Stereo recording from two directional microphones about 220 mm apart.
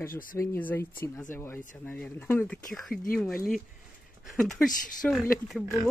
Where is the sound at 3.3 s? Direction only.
40° left (ahead or behind).